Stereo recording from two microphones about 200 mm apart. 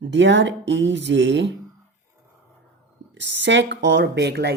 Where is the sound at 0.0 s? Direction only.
60° right (ahead or behind).